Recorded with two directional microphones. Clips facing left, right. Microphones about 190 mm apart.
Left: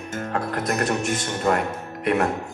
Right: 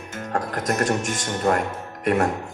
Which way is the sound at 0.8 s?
45° right (ahead or behind).